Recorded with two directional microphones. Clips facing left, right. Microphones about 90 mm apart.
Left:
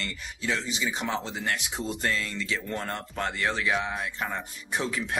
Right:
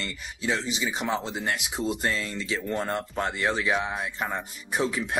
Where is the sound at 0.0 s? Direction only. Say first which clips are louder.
Right 2 dB; 20° right (ahead or behind).